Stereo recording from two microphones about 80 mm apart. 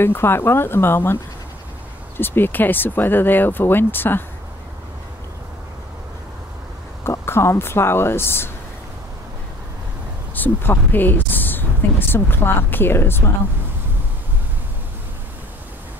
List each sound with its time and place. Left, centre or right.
0.0 s speech: left
2.1 s speech: left
7.1 s speech: left
10.3 s speech: left